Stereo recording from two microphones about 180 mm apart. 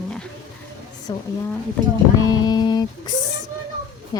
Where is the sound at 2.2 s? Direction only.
20° left (ahead or behind).